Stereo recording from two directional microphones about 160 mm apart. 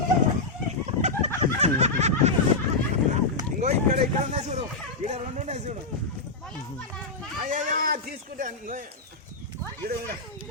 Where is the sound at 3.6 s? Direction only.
45° right (ahead or behind).